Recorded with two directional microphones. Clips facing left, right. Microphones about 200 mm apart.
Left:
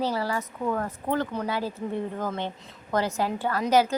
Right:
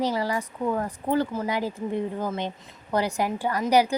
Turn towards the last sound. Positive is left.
turn(degrees=-15)  # may be behind; listen again after turning